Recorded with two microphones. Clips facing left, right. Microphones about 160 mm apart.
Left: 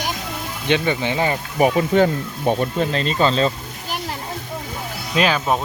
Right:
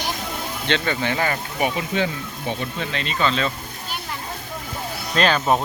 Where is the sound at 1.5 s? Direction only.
40° left (ahead or behind).